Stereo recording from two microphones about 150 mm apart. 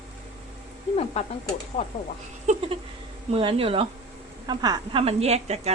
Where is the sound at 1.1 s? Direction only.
45° left (ahead or behind).